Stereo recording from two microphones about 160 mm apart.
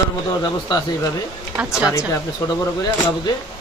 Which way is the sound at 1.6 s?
5° right (ahead or behind).